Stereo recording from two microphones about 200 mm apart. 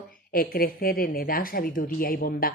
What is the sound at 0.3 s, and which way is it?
Speech, 45° left (ahead or behind).